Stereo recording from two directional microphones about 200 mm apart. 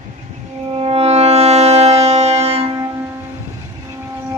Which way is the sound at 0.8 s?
30° right (ahead or behind).